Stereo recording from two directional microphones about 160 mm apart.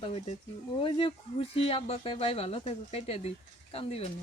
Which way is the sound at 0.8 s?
35° left (ahead or behind).